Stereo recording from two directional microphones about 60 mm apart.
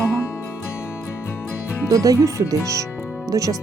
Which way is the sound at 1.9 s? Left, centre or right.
Right.